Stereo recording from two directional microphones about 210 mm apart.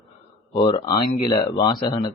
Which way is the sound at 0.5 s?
20° left (ahead or behind).